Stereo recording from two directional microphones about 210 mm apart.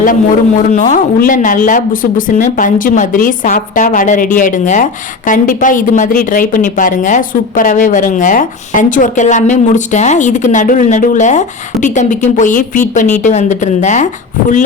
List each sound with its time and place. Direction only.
0.0 s speech: 40° left (ahead or behind)